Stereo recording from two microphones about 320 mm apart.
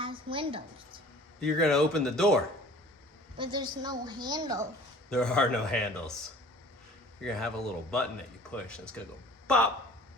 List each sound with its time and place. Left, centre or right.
0.0 s a sound: centre
1.4 s speech: centre
3.3 s a woman's voice: centre
5.0 s speech: centre
7.3 s speech: centre